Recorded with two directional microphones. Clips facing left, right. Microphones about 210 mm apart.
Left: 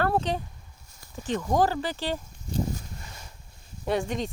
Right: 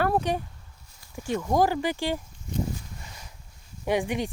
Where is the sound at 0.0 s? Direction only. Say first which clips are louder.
Right 1 dB; 10° right (ahead or behind).